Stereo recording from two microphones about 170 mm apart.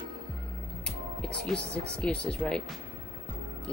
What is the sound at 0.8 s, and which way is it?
Speech, 5° left (ahead or behind).